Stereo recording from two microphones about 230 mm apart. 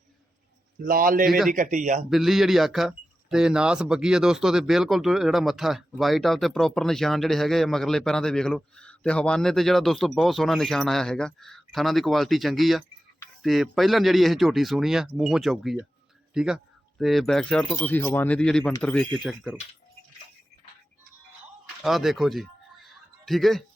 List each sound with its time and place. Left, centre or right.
0.8 s a man's voice: right
2.0 s speech: centre
21.8 s a sound: centre